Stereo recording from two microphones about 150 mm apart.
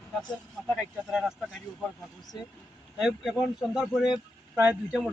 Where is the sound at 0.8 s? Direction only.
5° right (ahead or behind).